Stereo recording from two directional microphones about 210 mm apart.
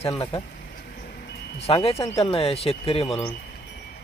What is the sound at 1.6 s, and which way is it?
Speech, 25° left (ahead or behind).